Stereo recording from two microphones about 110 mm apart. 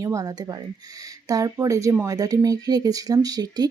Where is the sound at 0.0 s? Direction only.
30° right (ahead or behind).